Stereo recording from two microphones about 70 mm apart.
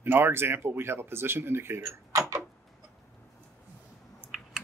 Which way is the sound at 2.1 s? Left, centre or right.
Right.